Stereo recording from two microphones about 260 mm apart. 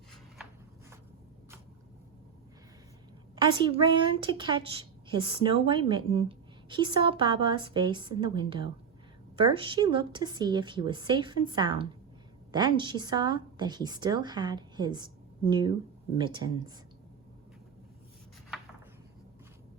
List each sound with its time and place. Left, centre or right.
3.3 s a woman's voice: centre